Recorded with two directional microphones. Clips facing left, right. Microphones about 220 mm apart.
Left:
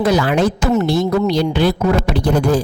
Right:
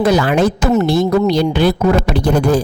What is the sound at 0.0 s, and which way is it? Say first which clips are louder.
Speech: right 2 dB; 55° right (ahead or behind).